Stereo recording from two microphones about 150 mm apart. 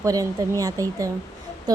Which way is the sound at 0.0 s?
25° right (ahead or behind).